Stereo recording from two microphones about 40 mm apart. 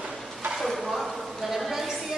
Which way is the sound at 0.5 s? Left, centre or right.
Centre.